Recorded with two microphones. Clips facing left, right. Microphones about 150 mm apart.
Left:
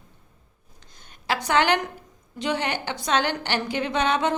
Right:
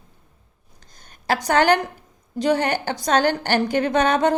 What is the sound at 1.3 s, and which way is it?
A woman's voice, 40° right (ahead or behind).